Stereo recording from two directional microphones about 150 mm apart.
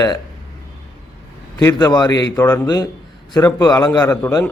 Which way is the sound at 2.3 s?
15° left (ahead or behind).